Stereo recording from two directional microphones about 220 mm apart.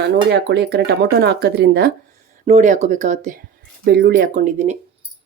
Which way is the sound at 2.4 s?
35° right (ahead or behind).